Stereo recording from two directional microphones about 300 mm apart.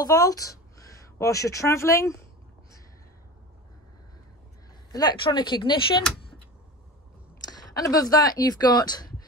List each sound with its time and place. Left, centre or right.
0.0 s a woman's voice: centre
4.9 s speech: centre
7.4 s speech: centre